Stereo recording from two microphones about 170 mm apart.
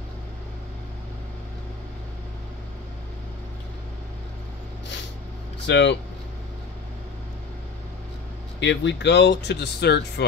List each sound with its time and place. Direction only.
5.7 s speech: 90° left
8.5 s speech: 90° left